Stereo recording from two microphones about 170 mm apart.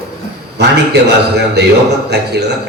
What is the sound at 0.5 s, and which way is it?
A man's voice, 75° right (ahead or behind).